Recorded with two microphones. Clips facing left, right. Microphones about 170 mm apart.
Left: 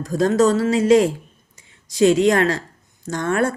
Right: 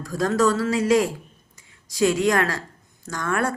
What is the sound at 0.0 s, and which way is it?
Speech, 20° left (ahead or behind).